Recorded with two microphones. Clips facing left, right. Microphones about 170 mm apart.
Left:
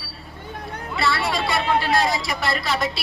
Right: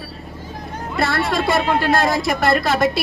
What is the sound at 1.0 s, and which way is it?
A woman's voice, 50° right (ahead or behind).